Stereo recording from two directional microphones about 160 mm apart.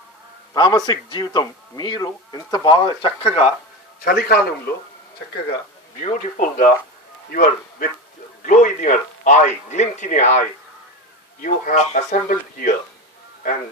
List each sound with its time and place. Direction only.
0.6 s speech: 25° left (ahead or behind)
4.0 s a man's voice: 70° left (ahead or behind)
6.0 s speech: 50° left (ahead or behind)
11.4 s speech: 50° left (ahead or behind)